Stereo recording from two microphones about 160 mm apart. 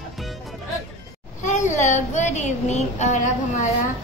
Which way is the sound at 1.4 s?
50° left (ahead or behind).